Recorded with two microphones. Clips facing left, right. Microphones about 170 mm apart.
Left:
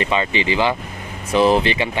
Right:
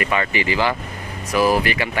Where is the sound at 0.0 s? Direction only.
20° left (ahead or behind).